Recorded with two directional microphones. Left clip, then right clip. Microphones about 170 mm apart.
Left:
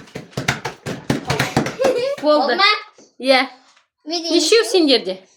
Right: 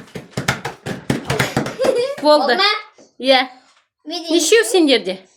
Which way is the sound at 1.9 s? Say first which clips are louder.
Right 1 dB; 5° right (ahead or behind).